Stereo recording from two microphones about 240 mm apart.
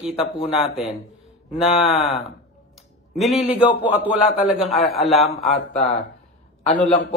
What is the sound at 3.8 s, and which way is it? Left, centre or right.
A man's voice, centre.